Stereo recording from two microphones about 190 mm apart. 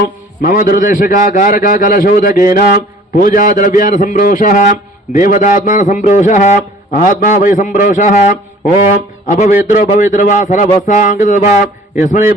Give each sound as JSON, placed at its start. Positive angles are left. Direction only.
{"t": 0.4, "sound": "a man's voice", "side_deg": 45}